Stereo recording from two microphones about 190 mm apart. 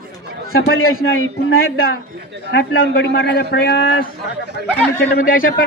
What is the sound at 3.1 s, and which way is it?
A man's voice, 55° left (ahead or behind).